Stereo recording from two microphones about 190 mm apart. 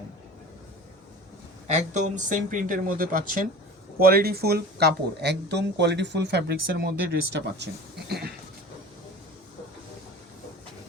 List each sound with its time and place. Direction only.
1.6 s speech: 40° right (ahead or behind); by 7.7 s 60° right (ahead or behind)